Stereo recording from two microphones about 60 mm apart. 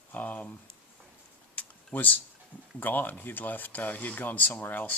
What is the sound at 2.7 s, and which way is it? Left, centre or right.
Speech, left.